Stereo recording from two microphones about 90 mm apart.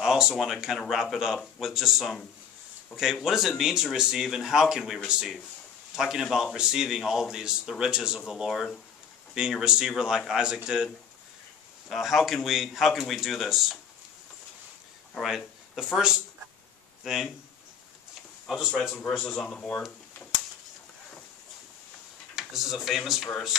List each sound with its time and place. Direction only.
0.0 s a man's voice: 5° right (ahead or behind)
11.9 s speech: centre (ahead or behind)
15.1 s speech: 5° right (ahead or behind)
18.5 s speech: 5° right (ahead or behind)
18.9 s speech: 10° left (ahead or behind)
22.3 s speech: 5° right (ahead or behind)